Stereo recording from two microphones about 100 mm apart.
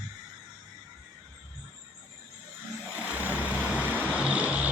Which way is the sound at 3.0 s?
15° right (ahead or behind).